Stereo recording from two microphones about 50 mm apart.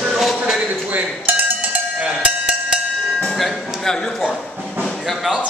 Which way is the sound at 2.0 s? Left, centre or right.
Right.